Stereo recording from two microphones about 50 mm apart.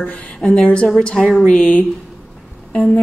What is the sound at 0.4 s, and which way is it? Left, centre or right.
A woman's voice, left.